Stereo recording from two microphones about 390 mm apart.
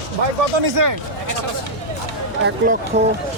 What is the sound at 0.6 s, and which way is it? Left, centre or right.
Speech, right.